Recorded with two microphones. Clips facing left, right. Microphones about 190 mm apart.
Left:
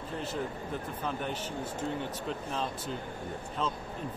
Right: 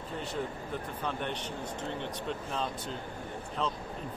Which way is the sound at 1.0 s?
5° left (ahead or behind).